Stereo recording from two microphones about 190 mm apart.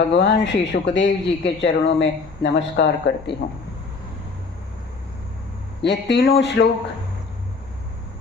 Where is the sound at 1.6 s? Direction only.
70° left (ahead or behind).